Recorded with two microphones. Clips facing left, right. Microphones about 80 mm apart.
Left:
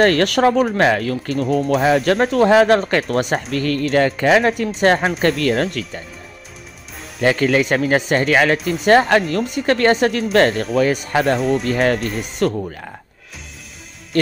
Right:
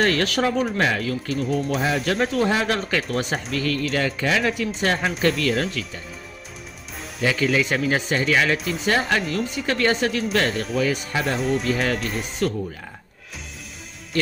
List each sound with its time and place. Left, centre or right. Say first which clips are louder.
0.0 s speech: left 7 dB; left
3.2 s speech: left 6 dB; left
3.5 s speech: left 6 dB; left
7.2 s speech: left 5 dB; left
11.3 s speech: left 4 dB; centre
11.7 s speech: left 6 dB; left
12.0 s speech: left 4 dB; centre
14.1 s speech: left 6 dB; left